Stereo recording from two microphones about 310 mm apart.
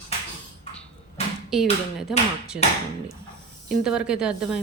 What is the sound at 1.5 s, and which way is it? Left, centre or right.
A woman's voice, centre.